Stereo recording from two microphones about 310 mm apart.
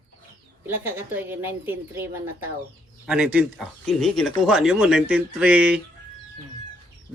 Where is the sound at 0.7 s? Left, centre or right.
Centre.